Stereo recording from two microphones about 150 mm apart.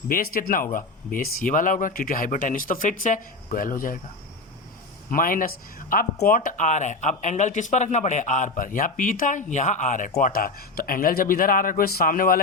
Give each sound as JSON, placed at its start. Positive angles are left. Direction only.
{"t": 0.1, "sound": "speech", "side_deg": 75}
{"t": 5.1, "sound": "speech", "side_deg": 65}